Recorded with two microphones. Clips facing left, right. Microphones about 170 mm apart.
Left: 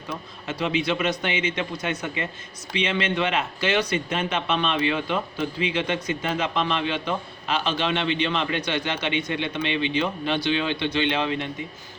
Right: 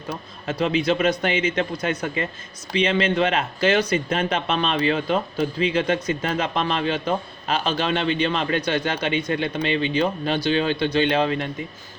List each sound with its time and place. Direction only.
0.1 s speech: 40° right (ahead or behind)